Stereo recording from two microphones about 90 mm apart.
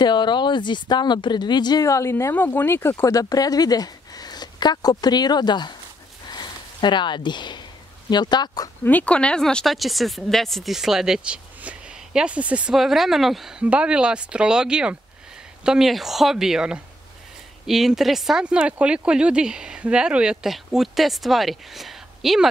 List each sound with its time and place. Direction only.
0.0 s speech: 55° left (ahead or behind)
1.9 s a woman's voice: 35° left (ahead or behind)
3.2 s speech: 45° left (ahead or behind)
6.2 s a sound: 55° left (ahead or behind)
8.1 s speech: 55° left (ahead or behind)
8.8 s speech: 15° left (ahead or behind); by 22.5 s centre (ahead or behind)